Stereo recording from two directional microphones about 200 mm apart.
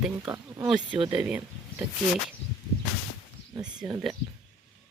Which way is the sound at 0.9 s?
25° right (ahead or behind).